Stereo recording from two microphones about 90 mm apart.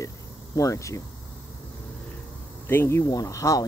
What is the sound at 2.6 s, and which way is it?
Speech, 30° left (ahead or behind).